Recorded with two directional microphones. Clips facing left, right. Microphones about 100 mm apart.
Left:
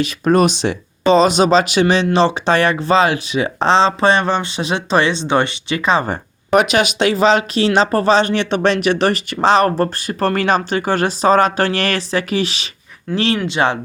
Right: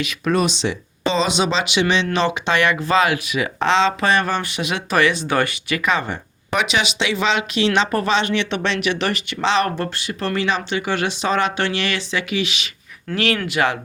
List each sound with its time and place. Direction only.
0.0 s speech: 40° left (ahead or behind)